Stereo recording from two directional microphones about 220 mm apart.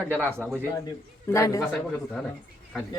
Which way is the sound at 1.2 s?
15° left (ahead or behind).